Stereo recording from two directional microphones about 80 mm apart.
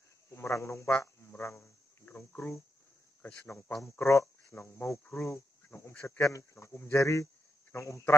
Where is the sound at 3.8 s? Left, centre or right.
Left.